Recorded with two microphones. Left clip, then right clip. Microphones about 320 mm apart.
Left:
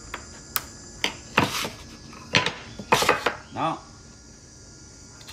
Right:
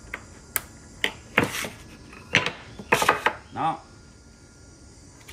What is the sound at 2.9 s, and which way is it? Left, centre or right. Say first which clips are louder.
Chopping: even; centre.